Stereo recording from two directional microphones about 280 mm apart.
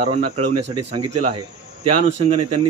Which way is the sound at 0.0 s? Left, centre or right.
Right.